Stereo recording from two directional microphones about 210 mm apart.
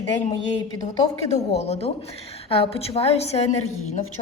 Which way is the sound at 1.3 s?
30° left (ahead or behind).